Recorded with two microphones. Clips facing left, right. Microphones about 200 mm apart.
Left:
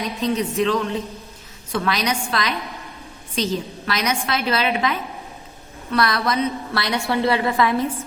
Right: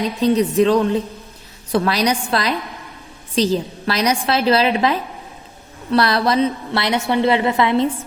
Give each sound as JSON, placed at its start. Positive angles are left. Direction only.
{"t": 0.0, "sound": "a woman's voice", "side_deg": -30}